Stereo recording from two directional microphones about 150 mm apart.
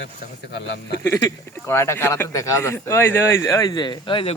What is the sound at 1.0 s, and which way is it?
Speech, 20° left (ahead or behind).